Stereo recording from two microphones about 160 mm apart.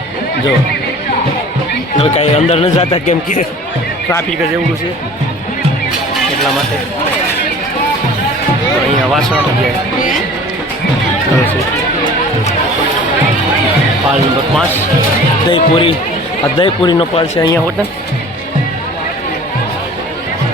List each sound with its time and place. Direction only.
2.0 s speech: 40° left (ahead or behind)
3.1 s speech: 55° left (ahead or behind)
15.4 s speech: 35° left (ahead or behind)
17.3 s speech: 20° left (ahead or behind)